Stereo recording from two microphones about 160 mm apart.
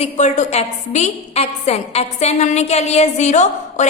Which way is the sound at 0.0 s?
50° left (ahead or behind).